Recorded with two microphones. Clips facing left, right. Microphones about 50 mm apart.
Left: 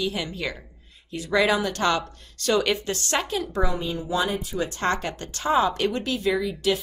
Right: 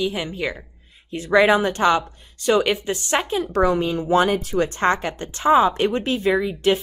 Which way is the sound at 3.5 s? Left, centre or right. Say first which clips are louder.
Right 7 dB; right.